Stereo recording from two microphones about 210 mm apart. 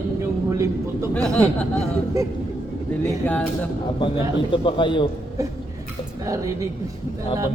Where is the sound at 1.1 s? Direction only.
5° left (ahead or behind).